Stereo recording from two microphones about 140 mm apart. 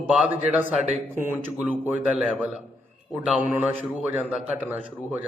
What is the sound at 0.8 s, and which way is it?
Speech, 55° right (ahead or behind).